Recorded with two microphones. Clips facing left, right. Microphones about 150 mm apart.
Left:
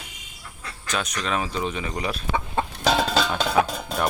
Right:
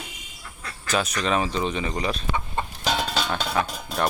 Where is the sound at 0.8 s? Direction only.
5° right (ahead or behind).